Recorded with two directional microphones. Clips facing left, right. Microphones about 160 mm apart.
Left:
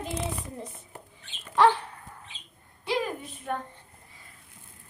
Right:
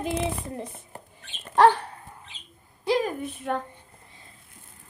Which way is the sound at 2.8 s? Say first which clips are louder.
Right 5 dB; 45° right (ahead or behind).